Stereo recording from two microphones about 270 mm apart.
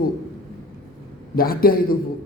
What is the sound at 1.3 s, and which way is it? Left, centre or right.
Speech, left.